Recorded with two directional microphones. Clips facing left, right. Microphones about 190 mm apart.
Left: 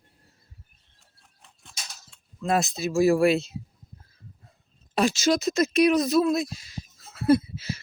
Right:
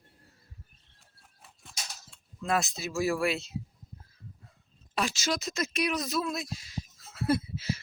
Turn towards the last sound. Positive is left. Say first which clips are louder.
# left 8 dB
turn(degrees=45)  # may be behind; listen again after turning